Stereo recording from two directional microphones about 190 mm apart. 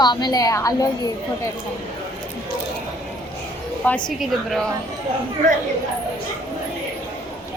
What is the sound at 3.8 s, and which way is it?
Speech, 10° left (ahead or behind).